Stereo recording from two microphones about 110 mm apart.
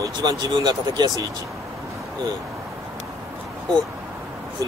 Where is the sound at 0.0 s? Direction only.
35° right (ahead or behind).